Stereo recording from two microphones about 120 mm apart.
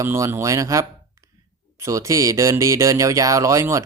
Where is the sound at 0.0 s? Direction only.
20° right (ahead or behind).